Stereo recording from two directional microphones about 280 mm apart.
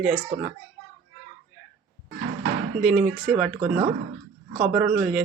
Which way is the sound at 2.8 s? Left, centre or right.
Centre.